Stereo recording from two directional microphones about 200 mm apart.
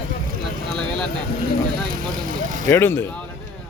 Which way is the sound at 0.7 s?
5° left (ahead or behind).